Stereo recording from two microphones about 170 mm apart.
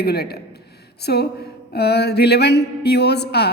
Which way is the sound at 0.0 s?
70° left (ahead or behind).